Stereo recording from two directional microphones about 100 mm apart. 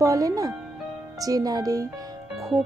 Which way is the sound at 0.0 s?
35° right (ahead or behind).